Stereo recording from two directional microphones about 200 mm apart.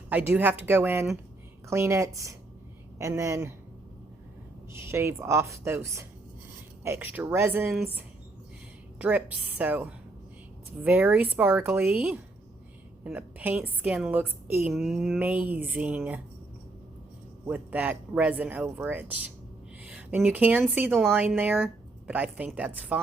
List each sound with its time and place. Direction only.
0.1 s a woman's voice: 10° right (ahead or behind)
4.7 s a woman's voice: 15° right (ahead or behind)
17.4 s a woman's voice: 10° right (ahead or behind)